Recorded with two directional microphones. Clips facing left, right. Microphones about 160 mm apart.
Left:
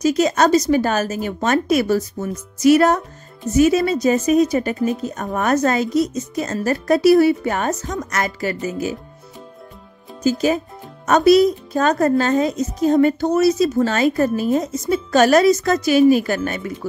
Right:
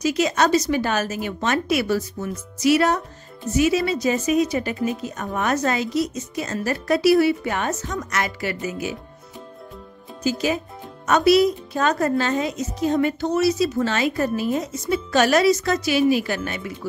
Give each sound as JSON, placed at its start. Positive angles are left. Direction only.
{"t": 0.0, "sound": "a woman's voice", "side_deg": 45}
{"t": 11.1, "sound": "a woman's voice", "side_deg": 45}